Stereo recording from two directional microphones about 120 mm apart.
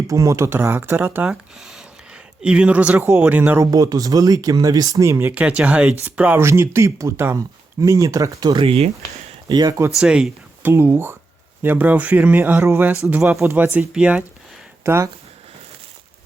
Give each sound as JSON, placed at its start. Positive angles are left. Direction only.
{"t": 0.1, "sound": "speech", "side_deg": -25}
{"t": 1.3, "sound": "speech", "side_deg": -5}
{"t": 3.6, "sound": "speech", "side_deg": -30}
{"t": 5.3, "sound": "speech", "side_deg": -10}
{"t": 8.6, "sound": "speech", "side_deg": -55}
{"t": 9.5, "sound": "speech", "side_deg": -35}
{"t": 10.0, "sound": "speech", "side_deg": -10}
{"t": 10.7, "sound": "speech", "side_deg": -20}
{"t": 13.7, "sound": "speech", "side_deg": -10}
{"t": 14.8, "sound": "speech", "side_deg": -20}